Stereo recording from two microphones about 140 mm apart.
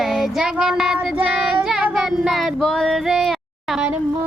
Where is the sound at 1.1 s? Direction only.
5° right (ahead or behind).